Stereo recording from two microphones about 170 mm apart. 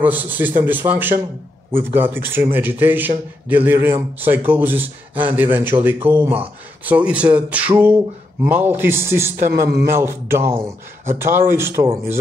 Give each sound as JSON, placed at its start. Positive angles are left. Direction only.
{"t": 0.0, "sound": "a man's voice", "side_deg": -10}
{"t": 9.4, "sound": "a man's voice", "side_deg": -65}
{"t": 9.8, "sound": "a man's voice", "side_deg": -15}